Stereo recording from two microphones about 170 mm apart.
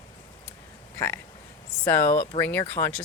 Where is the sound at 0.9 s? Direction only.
15° left (ahead or behind).